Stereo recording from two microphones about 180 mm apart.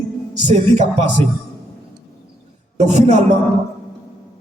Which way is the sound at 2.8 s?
40° right (ahead or behind).